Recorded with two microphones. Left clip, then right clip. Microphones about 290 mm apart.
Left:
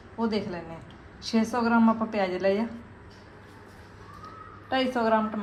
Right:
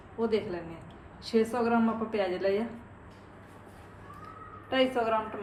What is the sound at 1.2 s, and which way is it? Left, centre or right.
A woman's voice, left.